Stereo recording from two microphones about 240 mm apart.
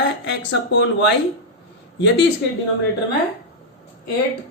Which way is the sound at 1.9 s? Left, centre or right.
Left.